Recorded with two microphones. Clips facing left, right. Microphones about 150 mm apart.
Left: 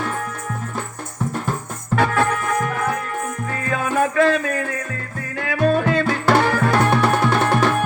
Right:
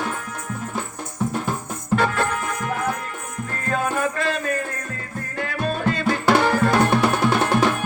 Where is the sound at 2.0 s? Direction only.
55° left (ahead or behind).